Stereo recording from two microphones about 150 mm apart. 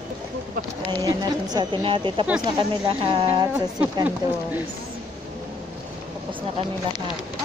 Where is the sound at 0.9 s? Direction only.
25° right (ahead or behind).